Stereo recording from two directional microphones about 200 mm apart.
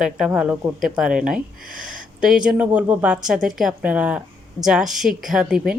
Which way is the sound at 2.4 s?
5° right (ahead or behind).